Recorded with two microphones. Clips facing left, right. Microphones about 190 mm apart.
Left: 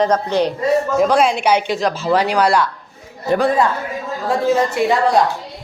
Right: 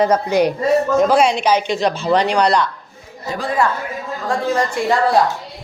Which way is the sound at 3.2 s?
60° left (ahead or behind).